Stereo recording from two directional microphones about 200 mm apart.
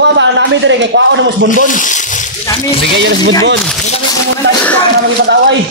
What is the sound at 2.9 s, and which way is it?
Speech, 60° right (ahead or behind).